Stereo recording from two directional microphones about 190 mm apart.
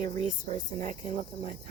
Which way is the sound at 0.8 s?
40° right (ahead or behind).